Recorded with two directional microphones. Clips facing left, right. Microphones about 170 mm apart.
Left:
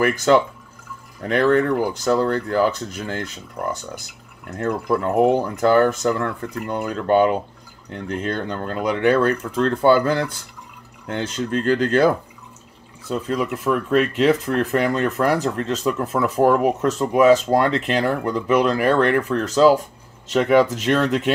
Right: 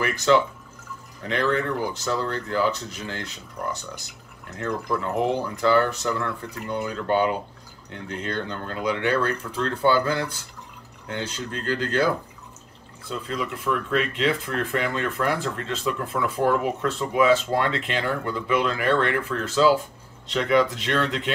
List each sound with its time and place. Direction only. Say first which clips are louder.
0.0 s speech: left 4 dB; 50° left (ahead or behind)
4.6 s speech: left 5 dB; 50° left (ahead or behind)
13.1 s speech: left 7 dB; 50° left (ahead or behind)